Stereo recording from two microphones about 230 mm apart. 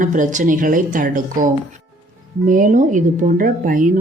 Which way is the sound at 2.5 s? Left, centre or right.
Right.